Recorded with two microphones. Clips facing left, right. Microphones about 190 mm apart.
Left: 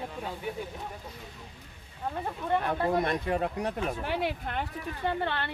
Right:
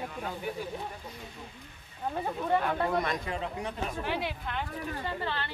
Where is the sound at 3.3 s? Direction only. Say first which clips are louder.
Left 5 dB; 55° left (ahead or behind).